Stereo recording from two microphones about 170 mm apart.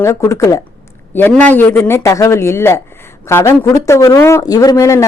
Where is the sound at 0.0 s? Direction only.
15° left (ahead or behind).